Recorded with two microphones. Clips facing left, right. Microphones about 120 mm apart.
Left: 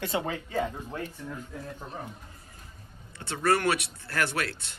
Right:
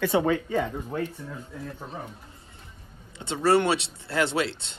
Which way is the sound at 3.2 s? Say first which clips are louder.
Right 4 dB; 25° right (ahead or behind).